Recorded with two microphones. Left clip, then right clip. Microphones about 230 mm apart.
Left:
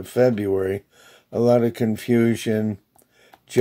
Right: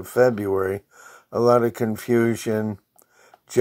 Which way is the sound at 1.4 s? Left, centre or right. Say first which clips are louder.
Even; centre.